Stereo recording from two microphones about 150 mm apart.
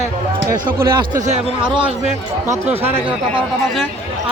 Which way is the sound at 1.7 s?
35° right (ahead or behind).